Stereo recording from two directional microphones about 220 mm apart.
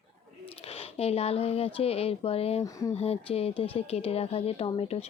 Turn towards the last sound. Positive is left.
turn(degrees=30)  # may be behind; listen again after turning